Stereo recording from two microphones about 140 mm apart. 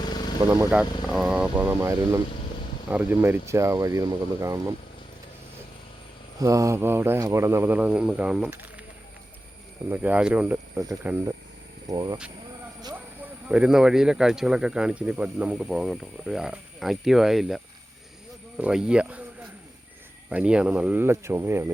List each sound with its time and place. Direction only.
0.4 s speech: 15° right (ahead or behind)
6.4 s speech: 25° right (ahead or behind)
9.9 s speech: 10° right (ahead or behind)
11.9 s speech: 30° right (ahead or behind)
13.5 s speech: 5° right (ahead or behind)